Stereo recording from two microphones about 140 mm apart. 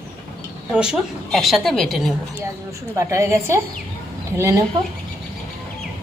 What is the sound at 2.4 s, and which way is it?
A woman's voice, 20° right (ahead or behind).